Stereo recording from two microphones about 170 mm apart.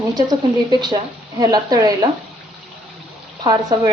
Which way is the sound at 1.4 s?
25° right (ahead or behind).